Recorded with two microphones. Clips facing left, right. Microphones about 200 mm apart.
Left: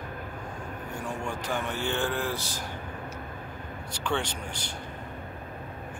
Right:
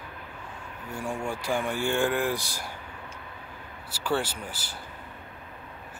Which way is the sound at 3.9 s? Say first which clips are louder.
Right 2 dB; 5° right (ahead or behind).